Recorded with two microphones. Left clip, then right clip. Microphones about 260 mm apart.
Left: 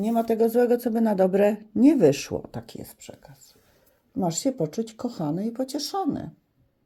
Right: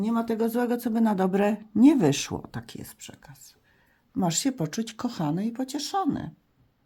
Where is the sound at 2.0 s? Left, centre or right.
Centre.